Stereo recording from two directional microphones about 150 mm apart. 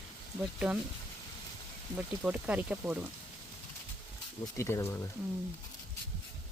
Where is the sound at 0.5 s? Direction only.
10° right (ahead or behind).